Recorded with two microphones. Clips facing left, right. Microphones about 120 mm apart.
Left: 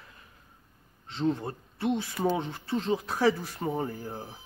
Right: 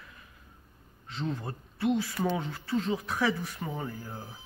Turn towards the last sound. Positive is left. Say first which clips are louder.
# left 5 dB
turn(degrees=35)  # may be behind; listen again after turning